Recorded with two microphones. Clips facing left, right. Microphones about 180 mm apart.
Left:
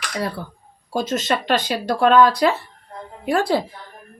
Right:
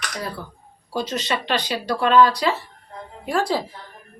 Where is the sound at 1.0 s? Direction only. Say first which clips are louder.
Left 3 dB; 50° left (ahead or behind).